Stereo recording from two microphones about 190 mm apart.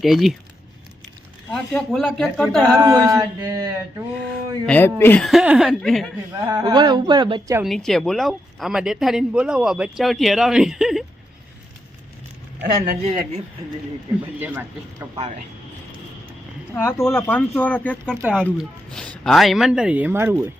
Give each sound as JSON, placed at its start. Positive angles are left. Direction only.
{"t": 0.0, "sound": "speech", "side_deg": 0}
{"t": 1.5, "sound": "speech", "side_deg": 5}
{"t": 2.7, "sound": "speech", "side_deg": -15}
{"t": 4.6, "sound": "speech", "side_deg": 10}
{"t": 5.2, "sound": "speech", "side_deg": -5}
{"t": 6.5, "sound": "speech", "side_deg": -20}
{"t": 7.6, "sound": "speech", "side_deg": 0}
{"t": 13.1, "sound": "speech", "side_deg": -35}
{"t": 14.3, "sound": "speech", "side_deg": -10}
{"t": 16.7, "sound": "speech", "side_deg": 15}